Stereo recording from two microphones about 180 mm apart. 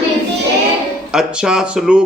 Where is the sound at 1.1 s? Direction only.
5° right (ahead or behind).